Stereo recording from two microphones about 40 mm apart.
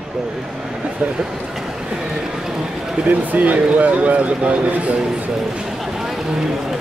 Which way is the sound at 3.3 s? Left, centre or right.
Right.